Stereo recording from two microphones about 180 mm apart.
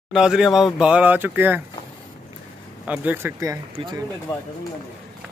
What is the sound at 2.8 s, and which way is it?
Speech, 10° right (ahead or behind).